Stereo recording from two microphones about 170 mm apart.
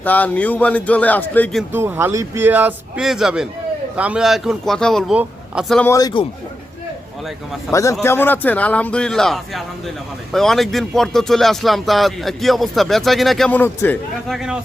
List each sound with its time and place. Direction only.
0.0 s a man's voice: 10° left (ahead or behind)
1.7 s speech: 15° right (ahead or behind)
5.8 s a man's voice: 20° left (ahead or behind)
7.7 s a man's voice: 15° left (ahead or behind)
14.3 s speech: 5° right (ahead or behind)